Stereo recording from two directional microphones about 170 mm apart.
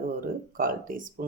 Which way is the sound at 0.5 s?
55° right (ahead or behind).